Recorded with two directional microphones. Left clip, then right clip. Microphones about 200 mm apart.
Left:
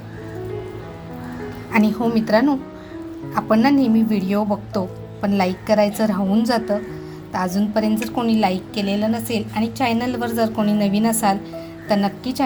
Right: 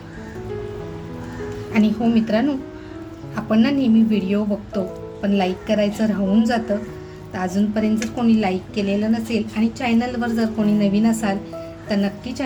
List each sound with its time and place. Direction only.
1.7 s a woman's voice: 30° left (ahead or behind)